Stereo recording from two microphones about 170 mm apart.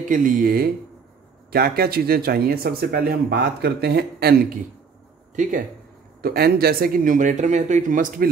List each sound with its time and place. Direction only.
0.0 s speech: 50° right (ahead or behind)
5.3 s speech: 50° right (ahead or behind)
6.2 s speech: 65° right (ahead or behind)